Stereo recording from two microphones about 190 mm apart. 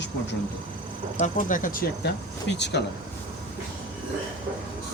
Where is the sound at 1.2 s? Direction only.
45° left (ahead or behind).